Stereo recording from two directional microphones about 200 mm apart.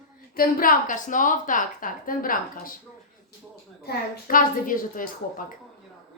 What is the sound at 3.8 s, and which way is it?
A woman's voice, 45° left (ahead or behind).